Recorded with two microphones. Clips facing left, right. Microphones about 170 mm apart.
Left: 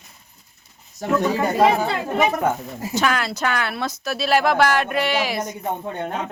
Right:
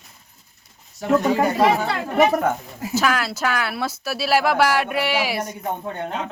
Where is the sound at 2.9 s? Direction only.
5° right (ahead or behind).